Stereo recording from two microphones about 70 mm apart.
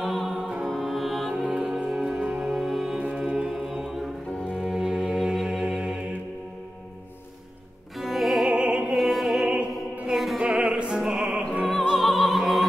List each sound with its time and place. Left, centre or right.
0.0 s music: centre
1.4 s music: centre
8.0 s music: centre
8.5 s opera: centre
8.9 s opera: centre
9.5 s music: centre
10.1 s music: centre
10.4 s opera: centre
11.9 s music: centre